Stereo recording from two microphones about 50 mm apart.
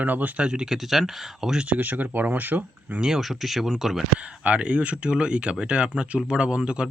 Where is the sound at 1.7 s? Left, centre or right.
Right.